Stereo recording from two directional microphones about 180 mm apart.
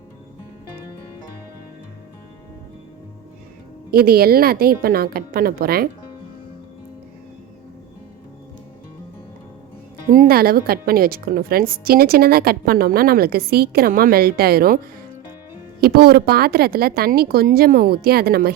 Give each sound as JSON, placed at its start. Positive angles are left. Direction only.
{"t": 3.9, "sound": "a woman's voice", "side_deg": -60}
{"t": 10.1, "sound": "a woman's voice", "side_deg": -50}
{"t": 15.8, "sound": "a woman's voice", "side_deg": -60}